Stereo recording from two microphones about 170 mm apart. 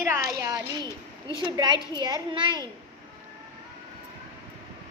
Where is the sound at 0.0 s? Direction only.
20° right (ahead or behind).